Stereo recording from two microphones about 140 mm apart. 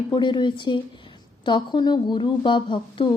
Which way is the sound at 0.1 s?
35° left (ahead or behind).